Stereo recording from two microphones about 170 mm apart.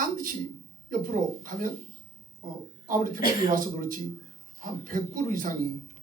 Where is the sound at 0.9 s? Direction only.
50° right (ahead or behind).